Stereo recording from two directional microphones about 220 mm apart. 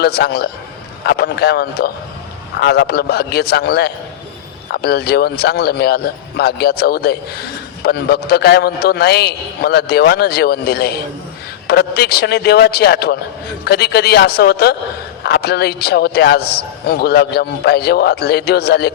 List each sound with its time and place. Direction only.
0.0 s a man's voice: 45° left (ahead or behind)